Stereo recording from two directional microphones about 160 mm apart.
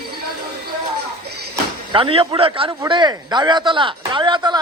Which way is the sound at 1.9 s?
35° right (ahead or behind).